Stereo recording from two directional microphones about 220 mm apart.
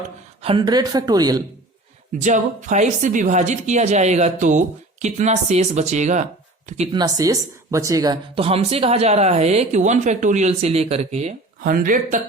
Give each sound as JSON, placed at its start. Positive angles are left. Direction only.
{"t": 0.4, "sound": "speech", "side_deg": -20}
{"t": 2.2, "sound": "a woman's voice", "side_deg": -35}
{"t": 6.9, "sound": "a woman's voice", "side_deg": -15}